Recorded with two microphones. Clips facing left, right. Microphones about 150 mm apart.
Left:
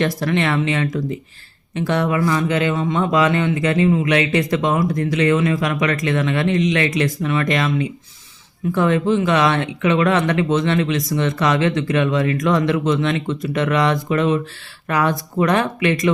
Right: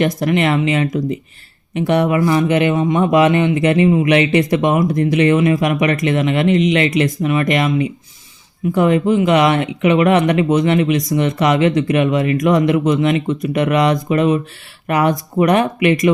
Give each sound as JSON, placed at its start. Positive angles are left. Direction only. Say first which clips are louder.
{"t": 0.0, "sound": "speech", "louder": "right 3 dB", "side_deg": -20}